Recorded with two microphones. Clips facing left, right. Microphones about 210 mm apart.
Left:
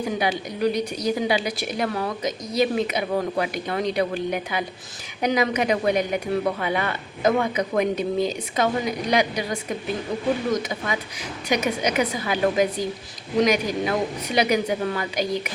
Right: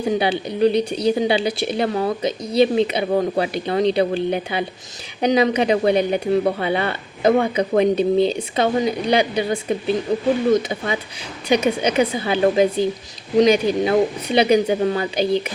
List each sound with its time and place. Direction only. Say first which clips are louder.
0.0 s speech: right 5 dB; 30° right (ahead or behind)